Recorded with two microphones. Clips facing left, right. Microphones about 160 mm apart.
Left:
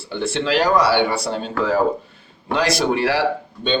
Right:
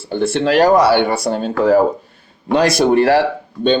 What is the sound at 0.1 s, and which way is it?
Speech, 50° right (ahead or behind).